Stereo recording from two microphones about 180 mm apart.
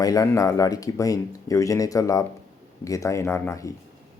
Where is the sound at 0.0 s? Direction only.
20° left (ahead or behind).